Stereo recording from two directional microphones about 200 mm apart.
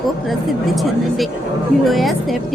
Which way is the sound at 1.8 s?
Centre (ahead or behind).